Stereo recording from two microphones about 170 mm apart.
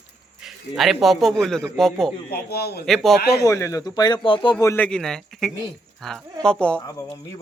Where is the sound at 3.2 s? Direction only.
70° left (ahead or behind).